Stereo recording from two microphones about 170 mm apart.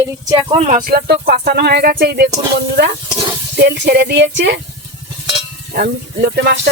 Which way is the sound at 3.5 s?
80° right.